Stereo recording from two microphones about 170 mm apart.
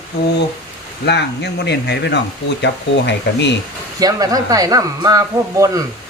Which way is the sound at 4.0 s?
20° right (ahead or behind).